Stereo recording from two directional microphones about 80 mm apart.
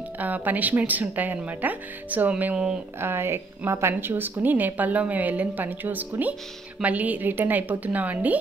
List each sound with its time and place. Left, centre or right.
0.2 s a woman's voice: right
3.0 s a woman's voice: right